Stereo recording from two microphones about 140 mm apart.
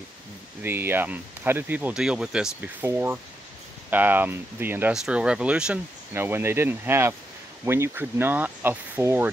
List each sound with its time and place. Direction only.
0.6 s speech: 15° right (ahead or behind)